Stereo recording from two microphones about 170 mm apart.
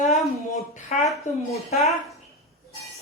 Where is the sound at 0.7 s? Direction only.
45° left (ahead or behind).